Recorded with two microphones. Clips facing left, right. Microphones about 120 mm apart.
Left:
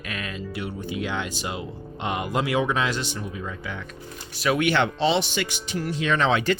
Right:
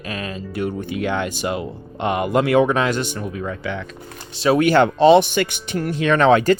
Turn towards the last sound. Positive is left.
turn(degrees=-45)  # may be behind; listen again after turning